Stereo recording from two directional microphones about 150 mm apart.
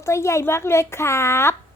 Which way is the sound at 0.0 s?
20° left (ahead or behind).